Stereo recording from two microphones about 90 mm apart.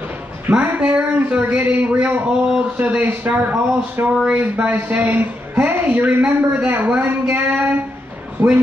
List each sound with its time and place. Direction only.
0.5 s speech: 15° right (ahead or behind)
4.1 s a man's voice: 10° right (ahead or behind)